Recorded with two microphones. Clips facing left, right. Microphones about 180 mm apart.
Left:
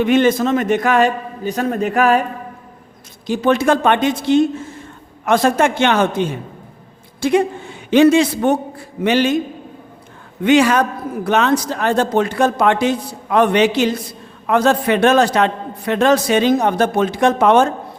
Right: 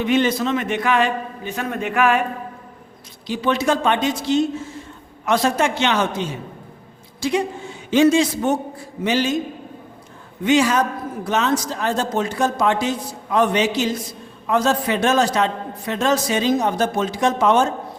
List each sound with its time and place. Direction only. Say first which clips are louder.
0.0 s a man's voice: left 5 dB; 50° left (ahead or behind)
3.2 s a man's voice: left 5 dB; 50° left (ahead or behind)
10.4 s a man's voice: left 4 dB; 65° left (ahead or behind)